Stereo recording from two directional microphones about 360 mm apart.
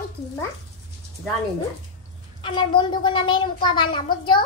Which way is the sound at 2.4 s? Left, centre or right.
Centre.